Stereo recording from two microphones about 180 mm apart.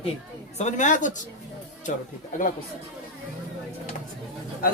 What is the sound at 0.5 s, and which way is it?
Speech, 40° left (ahead or behind).